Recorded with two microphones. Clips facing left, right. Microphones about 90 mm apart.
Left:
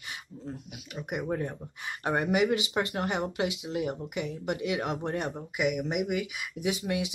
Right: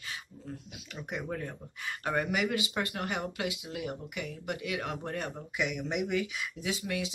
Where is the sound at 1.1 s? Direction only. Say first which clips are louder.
Left 5 dB; 25° left (ahead or behind).